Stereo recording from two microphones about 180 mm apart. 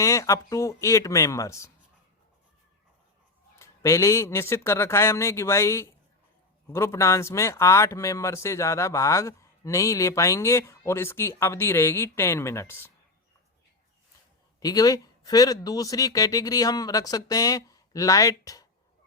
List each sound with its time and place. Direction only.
0.0 s speech: 15° left (ahead or behind)
3.5 s speech: 15° left (ahead or behind)
14.6 s speech: 20° left (ahead or behind)